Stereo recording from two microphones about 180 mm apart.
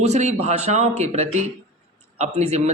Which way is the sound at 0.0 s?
40° right (ahead or behind).